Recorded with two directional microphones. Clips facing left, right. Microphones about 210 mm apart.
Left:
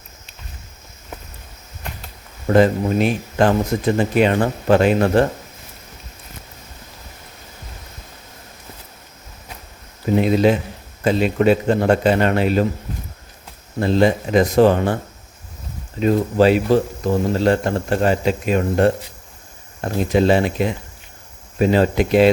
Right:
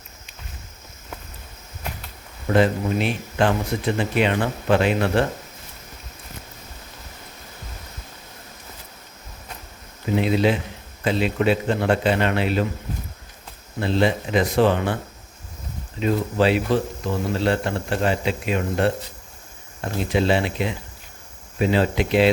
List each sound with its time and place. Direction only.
2.5 s speech: 45° left (ahead or behind)
10.2 s speech: 45° left (ahead or behind)
13.7 s speech: 45° left (ahead or behind)
16.0 s speech: 40° left (ahead or behind)